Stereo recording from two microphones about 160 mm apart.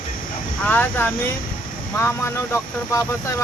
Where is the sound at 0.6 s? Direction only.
15° left (ahead or behind).